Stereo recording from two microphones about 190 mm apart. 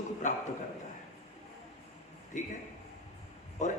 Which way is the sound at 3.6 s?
40° left (ahead or behind).